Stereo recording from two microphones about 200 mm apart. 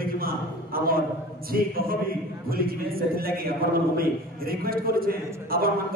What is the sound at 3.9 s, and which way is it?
A man's voice, 45° right (ahead or behind).